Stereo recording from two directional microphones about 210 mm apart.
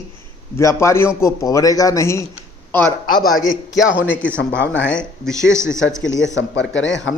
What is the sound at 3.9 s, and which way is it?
Speech, 5° right (ahead or behind).